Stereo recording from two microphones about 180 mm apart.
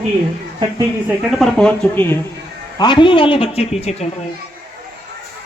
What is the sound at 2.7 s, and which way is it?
A woman's voice, 25° left (ahead or behind).